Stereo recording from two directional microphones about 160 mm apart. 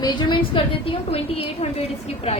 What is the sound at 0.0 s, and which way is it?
A woman's voice, 25° left (ahead or behind).